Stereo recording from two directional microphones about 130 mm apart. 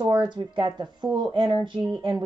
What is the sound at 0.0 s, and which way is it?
A woman's voice, 35° right (ahead or behind).